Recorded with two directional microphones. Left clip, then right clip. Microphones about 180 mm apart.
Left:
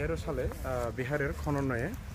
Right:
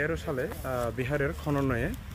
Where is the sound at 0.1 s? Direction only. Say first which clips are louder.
Right 3 dB; 55° right (ahead or behind).